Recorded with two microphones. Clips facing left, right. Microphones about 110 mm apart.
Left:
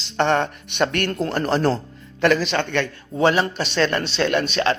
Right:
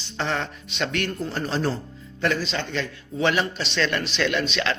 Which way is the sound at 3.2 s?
40° left (ahead or behind).